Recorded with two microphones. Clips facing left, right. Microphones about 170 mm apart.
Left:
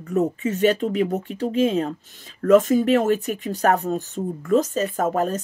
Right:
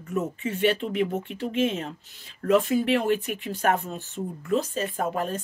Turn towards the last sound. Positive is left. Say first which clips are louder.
# left 6 dB
turn(degrees=45)  # may be behind; listen again after turning